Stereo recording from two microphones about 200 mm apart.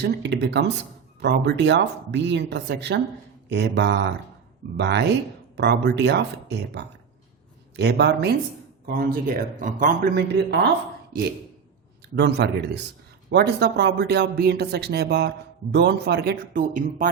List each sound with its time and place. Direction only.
0.0 s speech: 55° right (ahead or behind)
12.1 s speech: 60° right (ahead or behind); by 17.1 s 45° right (ahead or behind)